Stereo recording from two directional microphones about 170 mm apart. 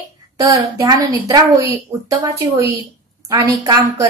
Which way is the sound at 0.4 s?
20° right (ahead or behind).